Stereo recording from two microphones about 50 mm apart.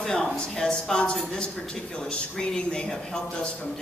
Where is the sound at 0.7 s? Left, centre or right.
Centre.